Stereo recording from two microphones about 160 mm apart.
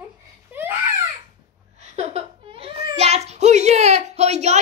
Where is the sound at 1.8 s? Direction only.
40° right (ahead or behind).